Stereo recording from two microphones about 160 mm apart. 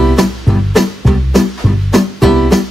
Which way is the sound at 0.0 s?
Centre (ahead or behind).